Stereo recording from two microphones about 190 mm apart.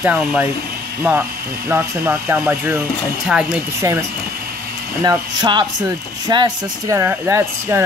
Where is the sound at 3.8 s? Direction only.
15° right (ahead or behind).